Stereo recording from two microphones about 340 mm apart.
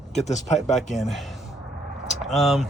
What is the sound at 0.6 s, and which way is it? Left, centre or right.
Speech, centre.